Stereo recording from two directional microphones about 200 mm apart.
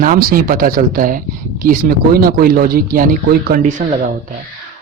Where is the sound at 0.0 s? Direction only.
45° right (ahead or behind).